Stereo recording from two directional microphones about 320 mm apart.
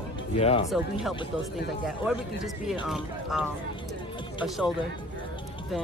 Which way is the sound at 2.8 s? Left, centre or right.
Centre.